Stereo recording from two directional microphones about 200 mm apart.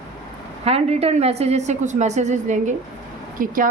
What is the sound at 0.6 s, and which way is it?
A woman's voice, 30° right (ahead or behind).